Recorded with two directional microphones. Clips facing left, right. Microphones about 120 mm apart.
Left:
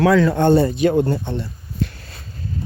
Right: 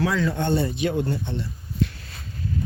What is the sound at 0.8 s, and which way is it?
Speech, 45° left (ahead or behind).